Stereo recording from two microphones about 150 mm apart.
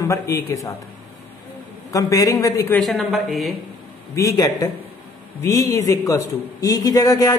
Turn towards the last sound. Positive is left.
turn(degrees=20)  # may be behind; listen again after turning